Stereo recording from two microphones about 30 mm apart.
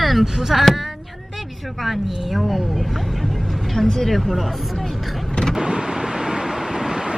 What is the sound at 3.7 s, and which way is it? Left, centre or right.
Speech, centre.